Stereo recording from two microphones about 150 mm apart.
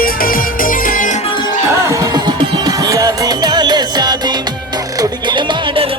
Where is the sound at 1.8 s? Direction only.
20° right (ahead or behind).